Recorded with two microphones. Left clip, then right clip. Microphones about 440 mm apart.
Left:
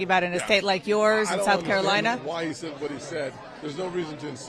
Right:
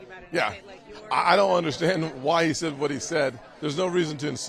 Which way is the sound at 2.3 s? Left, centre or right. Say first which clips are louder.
Right 7 dB; right.